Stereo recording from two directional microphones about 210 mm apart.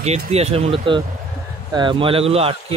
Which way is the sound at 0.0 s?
30° right (ahead or behind).